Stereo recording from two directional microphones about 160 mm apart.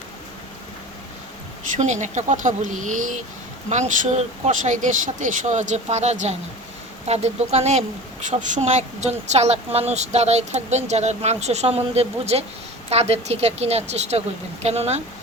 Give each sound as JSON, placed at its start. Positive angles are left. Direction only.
{"t": 1.7, "sound": "a woman's voice", "side_deg": -50}